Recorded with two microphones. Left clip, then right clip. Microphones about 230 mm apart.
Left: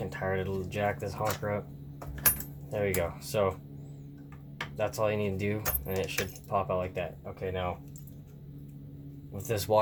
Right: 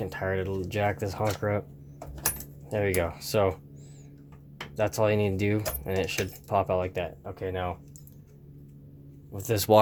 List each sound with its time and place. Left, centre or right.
0.0 s keys jangling: right
2.6 s keys jangling: right
4.8 s keys jangling: right
9.3 s keys jangling: right